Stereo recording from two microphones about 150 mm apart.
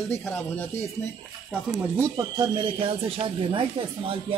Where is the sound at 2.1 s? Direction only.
30° right (ahead or behind).